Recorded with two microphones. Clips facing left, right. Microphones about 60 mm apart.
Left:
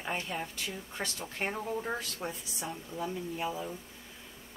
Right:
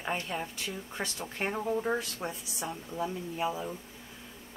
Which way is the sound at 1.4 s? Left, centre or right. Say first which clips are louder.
Right 3 dB; centre.